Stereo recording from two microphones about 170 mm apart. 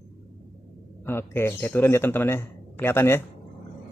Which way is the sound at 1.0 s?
15° left (ahead or behind).